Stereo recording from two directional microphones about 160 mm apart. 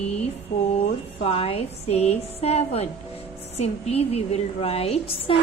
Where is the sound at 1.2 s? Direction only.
35° left (ahead or behind).